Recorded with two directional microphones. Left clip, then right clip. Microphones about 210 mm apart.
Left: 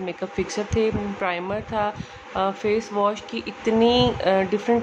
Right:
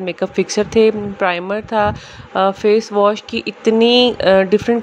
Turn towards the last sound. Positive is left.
turn(degrees=-30)  # may be behind; listen again after turning